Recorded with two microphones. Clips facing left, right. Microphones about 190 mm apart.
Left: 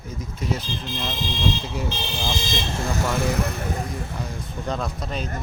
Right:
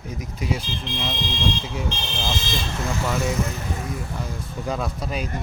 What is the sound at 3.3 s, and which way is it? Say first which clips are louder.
Speech: left 1 dB; 65° left (ahead or behind).